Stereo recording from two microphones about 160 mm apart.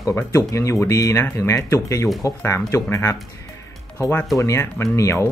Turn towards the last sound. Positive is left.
turn(degrees=20)  # may be behind; listen again after turning